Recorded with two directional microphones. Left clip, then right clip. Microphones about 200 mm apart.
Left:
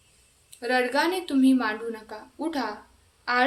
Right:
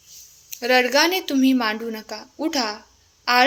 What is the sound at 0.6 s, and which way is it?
A woman's voice, 35° right (ahead or behind).